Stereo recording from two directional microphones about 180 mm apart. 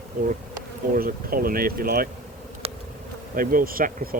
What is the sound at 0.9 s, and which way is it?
Speech, 55° right (ahead or behind).